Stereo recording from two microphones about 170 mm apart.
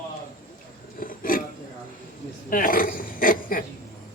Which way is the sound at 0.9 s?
55° left (ahead or behind).